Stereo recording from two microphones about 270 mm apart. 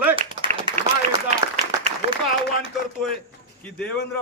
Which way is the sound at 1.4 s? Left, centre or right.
Centre.